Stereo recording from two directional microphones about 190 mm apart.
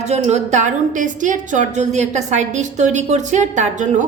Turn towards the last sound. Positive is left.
turn(degrees=-40)  # may be behind; listen again after turning